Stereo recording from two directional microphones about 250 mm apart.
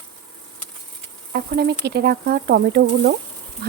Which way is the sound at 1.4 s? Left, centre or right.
Right.